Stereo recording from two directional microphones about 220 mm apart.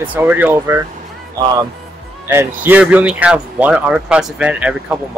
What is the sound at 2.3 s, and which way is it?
Speech, 10° right (ahead or behind).